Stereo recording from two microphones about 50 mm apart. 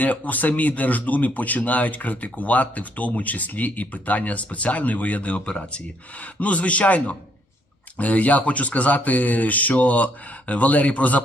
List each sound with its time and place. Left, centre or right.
0.0 s a man's voice: left